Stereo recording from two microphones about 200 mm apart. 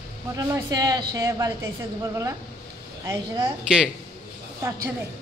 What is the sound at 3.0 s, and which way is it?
Speech, 15° right (ahead or behind).